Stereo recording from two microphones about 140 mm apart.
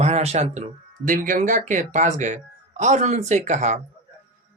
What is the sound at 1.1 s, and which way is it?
Speech, 65° right (ahead or behind).